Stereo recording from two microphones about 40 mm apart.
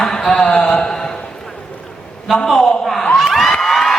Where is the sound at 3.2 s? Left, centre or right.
Centre.